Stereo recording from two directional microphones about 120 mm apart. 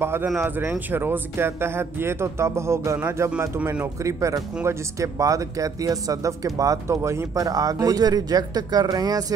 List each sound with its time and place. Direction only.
0.0 s speech: 20° right (ahead or behind)
3.0 s speech: 15° right (ahead or behind); by 9.2 s 35° right (ahead or behind)